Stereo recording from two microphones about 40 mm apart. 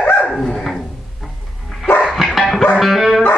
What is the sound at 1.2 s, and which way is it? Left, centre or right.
Music, centre.